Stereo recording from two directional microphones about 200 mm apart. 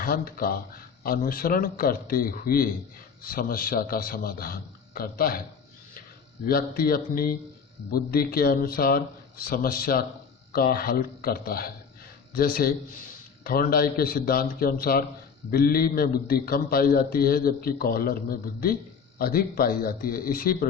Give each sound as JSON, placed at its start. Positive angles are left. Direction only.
{"t": 0.0, "sound": "a man's voice", "side_deg": 45}
{"t": 6.5, "sound": "a man's voice", "side_deg": 50}